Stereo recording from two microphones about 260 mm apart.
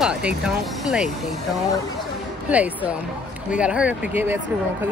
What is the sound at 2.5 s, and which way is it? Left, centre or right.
Speech, centre.